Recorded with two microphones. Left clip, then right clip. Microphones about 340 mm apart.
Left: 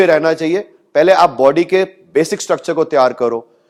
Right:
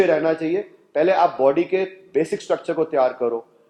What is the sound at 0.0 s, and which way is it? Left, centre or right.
A man's voice, left.